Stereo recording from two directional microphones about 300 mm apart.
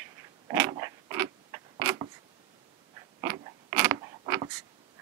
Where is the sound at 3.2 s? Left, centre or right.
Centre.